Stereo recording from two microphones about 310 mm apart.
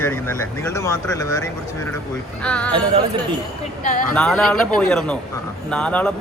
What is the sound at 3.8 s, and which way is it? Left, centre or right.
Speech, left.